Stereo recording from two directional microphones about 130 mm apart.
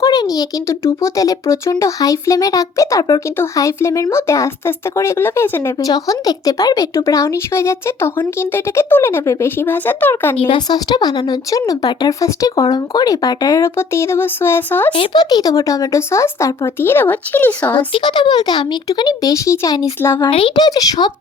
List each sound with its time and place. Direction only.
0.0 s speech: 30° left (ahead or behind)
10.3 s speech: 40° left (ahead or behind); by 14.9 s 15° left (ahead or behind)
14.9 s speech: 35° left (ahead or behind); by 17.7 s 15° left (ahead or behind)
17.7 s speech: 35° left (ahead or behind)
20.2 s speech: 40° left (ahead or behind)
20.7 s speech: 30° left (ahead or behind)